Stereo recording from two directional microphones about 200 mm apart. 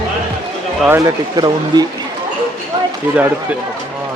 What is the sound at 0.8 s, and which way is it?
Speech, 15° right (ahead or behind).